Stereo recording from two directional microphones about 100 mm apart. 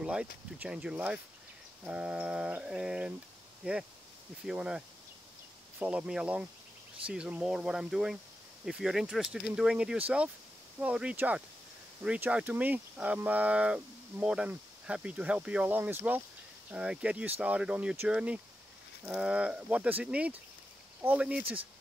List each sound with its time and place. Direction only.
0.0 s speech: 10° right (ahead or behind)
4.5 s speech: 5° right (ahead or behind)
16.7 s speech: 10° right (ahead or behind)